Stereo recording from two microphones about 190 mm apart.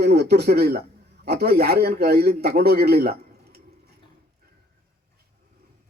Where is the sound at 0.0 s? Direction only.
60° right (ahead or behind).